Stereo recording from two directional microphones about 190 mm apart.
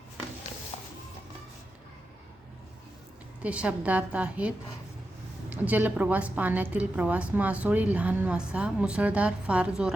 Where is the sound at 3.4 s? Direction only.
5° right (ahead or behind).